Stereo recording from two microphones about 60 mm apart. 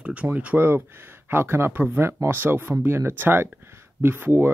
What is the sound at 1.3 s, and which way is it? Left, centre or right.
Speech, right.